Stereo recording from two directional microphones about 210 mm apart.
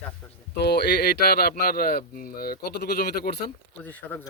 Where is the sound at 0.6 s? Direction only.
50° left (ahead or behind).